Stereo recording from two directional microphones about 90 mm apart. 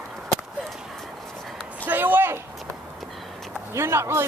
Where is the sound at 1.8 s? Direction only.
20° right (ahead or behind).